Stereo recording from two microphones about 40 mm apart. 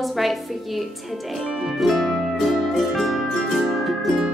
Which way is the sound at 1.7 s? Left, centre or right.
Centre.